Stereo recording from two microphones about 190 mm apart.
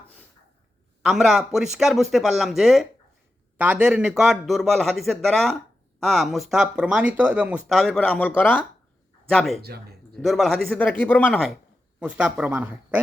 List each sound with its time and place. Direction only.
1.0 s speech: centre (ahead or behind)
9.6 s speech: 55° right (ahead or behind)
10.2 s speech: centre (ahead or behind)
11.9 s speech: 5° right (ahead or behind)